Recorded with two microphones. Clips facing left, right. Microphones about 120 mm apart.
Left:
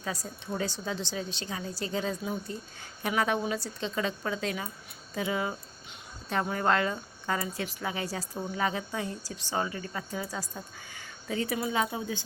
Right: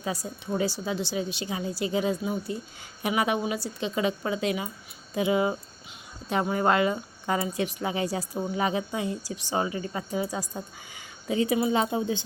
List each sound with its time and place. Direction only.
0.0 s speech: 15° right (ahead or behind)